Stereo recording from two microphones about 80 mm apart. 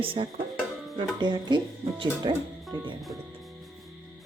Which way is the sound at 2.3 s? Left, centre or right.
Right.